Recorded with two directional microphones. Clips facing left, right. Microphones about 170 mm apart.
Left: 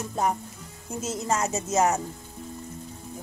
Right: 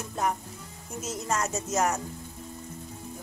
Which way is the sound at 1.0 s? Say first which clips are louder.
Left 3 dB; 25° left (ahead or behind).